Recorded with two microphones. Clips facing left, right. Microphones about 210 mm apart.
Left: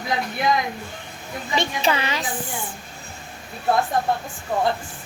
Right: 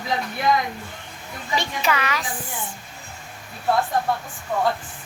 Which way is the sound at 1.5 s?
25° left (ahead or behind).